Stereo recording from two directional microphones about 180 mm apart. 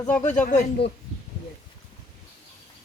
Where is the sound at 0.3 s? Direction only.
45° left (ahead or behind).